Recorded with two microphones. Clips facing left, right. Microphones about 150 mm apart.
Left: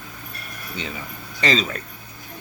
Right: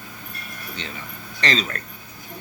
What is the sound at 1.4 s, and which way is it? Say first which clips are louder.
Speech: left 3 dB; 5° left (ahead or behind).